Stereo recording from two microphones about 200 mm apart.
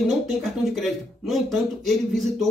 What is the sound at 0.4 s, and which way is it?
Speech, centre (ahead or behind).